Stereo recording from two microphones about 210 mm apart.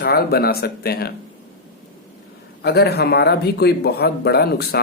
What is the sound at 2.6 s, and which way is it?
Speech, 50° left (ahead or behind).